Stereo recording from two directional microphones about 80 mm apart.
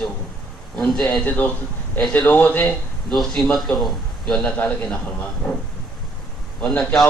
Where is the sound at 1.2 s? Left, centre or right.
Left.